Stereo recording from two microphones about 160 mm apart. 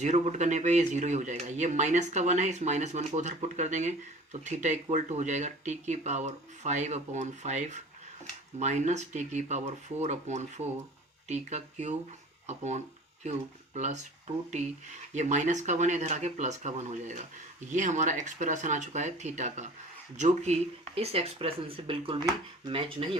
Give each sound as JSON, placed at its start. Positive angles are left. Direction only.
{"t": 0.0, "sound": "speech", "side_deg": -45}